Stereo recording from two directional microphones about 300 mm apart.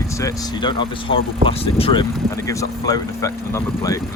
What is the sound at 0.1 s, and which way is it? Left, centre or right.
Speech, centre.